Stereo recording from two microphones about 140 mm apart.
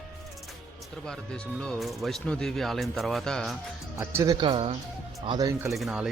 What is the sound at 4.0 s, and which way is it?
Speech, 20° right (ahead or behind).